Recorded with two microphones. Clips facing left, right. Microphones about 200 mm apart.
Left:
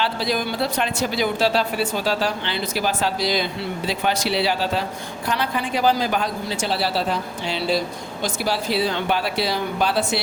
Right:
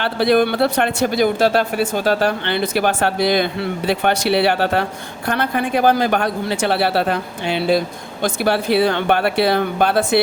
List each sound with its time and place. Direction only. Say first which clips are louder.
0.0 s speech: right 8 dB; 60° right (ahead or behind)